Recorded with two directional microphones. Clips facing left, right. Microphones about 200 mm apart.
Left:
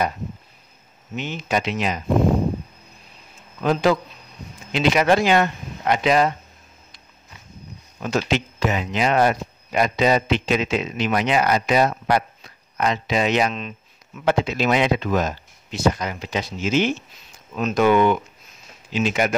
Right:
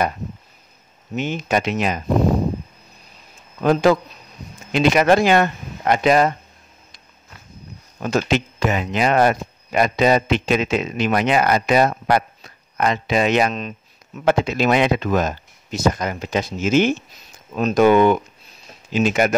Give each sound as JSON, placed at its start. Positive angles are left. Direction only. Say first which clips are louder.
{"t": 1.1, "sound": "speech", "louder": "right 3 dB", "side_deg": -50}
{"t": 3.6, "sound": "speech", "louder": "right 3 dB", "side_deg": -45}
{"t": 8.0, "sound": "speech", "louder": "right 3 dB", "side_deg": -45}